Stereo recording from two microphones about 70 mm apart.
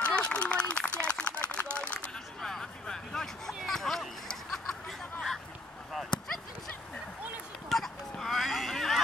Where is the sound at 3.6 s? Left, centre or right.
Centre.